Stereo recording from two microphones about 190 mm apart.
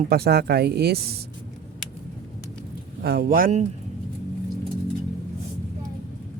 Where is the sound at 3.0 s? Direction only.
55° right (ahead or behind).